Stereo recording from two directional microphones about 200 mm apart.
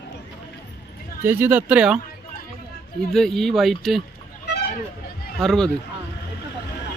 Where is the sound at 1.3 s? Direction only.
10° right (ahead or behind).